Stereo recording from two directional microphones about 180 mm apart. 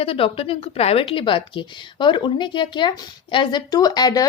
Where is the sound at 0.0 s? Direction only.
30° left (ahead or behind).